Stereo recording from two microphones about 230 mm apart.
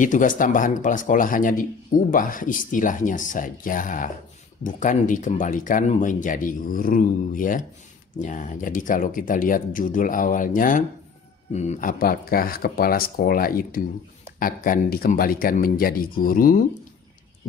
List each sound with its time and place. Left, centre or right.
0.0 s speech: left